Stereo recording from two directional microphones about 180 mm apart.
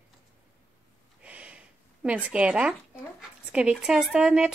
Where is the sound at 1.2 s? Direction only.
5° right (ahead or behind).